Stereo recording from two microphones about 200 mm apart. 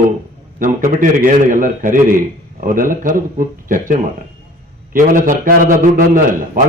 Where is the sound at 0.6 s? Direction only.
45° right (ahead or behind).